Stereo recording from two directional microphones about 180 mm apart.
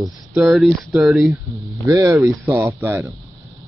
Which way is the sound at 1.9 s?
20° right (ahead or behind).